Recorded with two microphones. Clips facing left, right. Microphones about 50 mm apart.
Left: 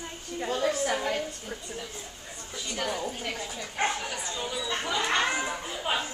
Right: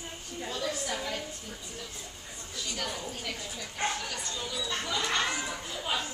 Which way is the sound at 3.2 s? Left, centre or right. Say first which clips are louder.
Left 4 dB; left.